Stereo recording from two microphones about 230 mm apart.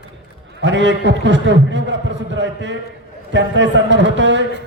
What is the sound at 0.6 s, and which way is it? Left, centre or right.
A man's voice, right.